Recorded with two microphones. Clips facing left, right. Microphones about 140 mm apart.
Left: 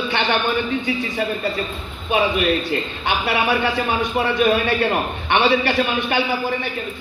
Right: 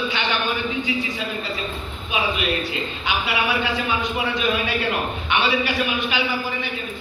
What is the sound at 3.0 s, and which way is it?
A man's voice, 55° left (ahead or behind).